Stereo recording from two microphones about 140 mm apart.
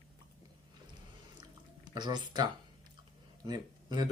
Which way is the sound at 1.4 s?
30° right (ahead or behind).